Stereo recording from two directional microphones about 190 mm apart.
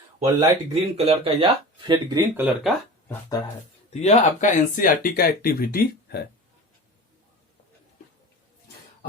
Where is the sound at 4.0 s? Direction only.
40° left (ahead or behind).